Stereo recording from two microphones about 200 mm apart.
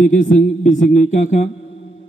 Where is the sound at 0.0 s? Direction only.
40° left (ahead or behind).